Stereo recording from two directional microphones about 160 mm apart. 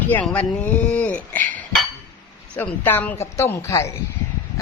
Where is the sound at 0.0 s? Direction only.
10° left (ahead or behind).